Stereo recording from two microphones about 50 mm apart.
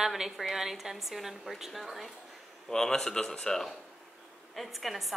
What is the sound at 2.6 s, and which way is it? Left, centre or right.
Speech, centre.